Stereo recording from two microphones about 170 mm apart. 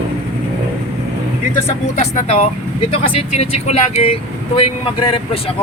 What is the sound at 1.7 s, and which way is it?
Speech, 40° left (ahead or behind).